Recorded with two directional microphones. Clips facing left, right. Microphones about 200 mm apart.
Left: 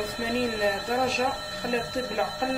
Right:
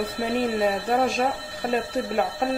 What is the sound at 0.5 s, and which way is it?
Speech, 50° right (ahead or behind).